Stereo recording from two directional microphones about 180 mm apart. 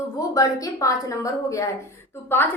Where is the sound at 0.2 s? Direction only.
20° left (ahead or behind).